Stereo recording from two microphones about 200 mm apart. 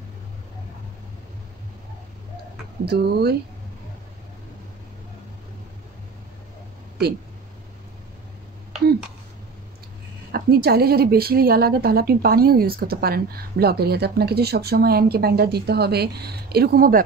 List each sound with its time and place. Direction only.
2.8 s a woman's voice: 55° right (ahead or behind)
10.3 s a woman's voice: 50° right (ahead or behind)